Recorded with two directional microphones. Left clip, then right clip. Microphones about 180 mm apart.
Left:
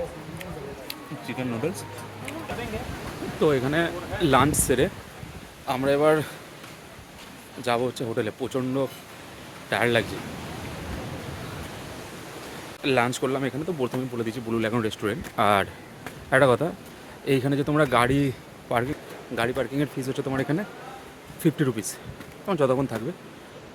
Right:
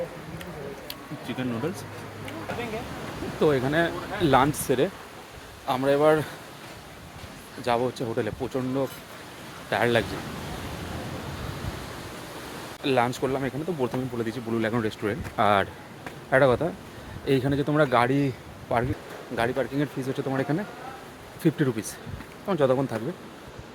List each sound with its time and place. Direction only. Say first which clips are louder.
0.9 s a sound: left 1 dB; 20° left (ahead or behind)
3.4 s speech: even; 5° left (ahead or behind)
4.6 s speech: left 1 dB; 20° left (ahead or behind)
5.6 s speech: even; 5° left (ahead or behind)
7.6 s speech: even; 10° left (ahead or behind)
12.8 s speech: left 1 dB; 10° left (ahead or behind)
17.2 s speech: even; 5° left (ahead or behind)